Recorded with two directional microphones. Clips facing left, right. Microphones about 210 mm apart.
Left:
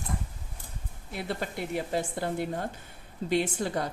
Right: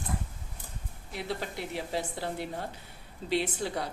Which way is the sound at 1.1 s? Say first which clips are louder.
Left 2 dB; 55° left (ahead or behind).